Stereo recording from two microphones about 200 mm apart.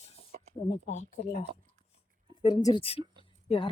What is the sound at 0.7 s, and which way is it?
Speech, 35° left (ahead or behind).